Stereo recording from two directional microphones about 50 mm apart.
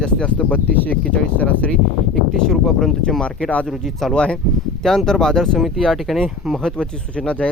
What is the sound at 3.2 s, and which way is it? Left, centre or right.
Speech, left.